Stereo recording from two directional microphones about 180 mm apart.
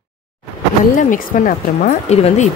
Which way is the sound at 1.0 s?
45° left (ahead or behind).